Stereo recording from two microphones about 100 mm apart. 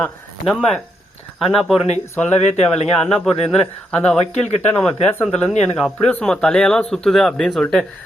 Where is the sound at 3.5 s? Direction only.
10° left (ahead or behind).